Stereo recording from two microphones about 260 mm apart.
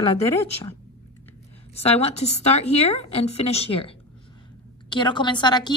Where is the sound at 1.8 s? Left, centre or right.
Left.